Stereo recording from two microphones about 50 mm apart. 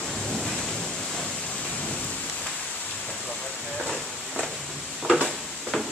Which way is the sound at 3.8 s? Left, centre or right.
Centre.